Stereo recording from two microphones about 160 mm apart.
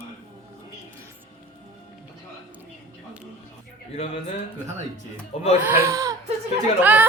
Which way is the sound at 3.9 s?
40° left (ahead or behind).